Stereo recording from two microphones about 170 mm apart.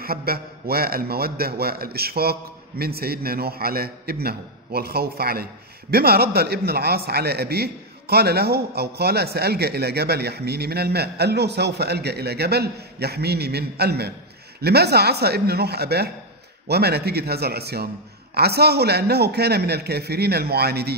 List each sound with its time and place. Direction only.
0.0 s a man's voice: 60° right (ahead or behind)